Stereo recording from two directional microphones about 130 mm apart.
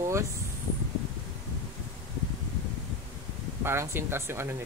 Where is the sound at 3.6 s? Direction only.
20° right (ahead or behind).